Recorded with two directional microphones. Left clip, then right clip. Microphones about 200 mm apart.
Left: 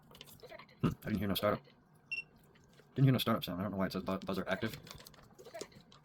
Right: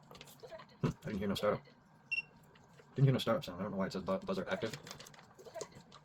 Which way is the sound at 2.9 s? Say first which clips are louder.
Left 1 dB; 50° left (ahead or behind).